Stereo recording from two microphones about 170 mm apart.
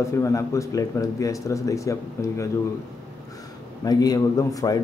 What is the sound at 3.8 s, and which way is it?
Speech, 20° left (ahead or behind).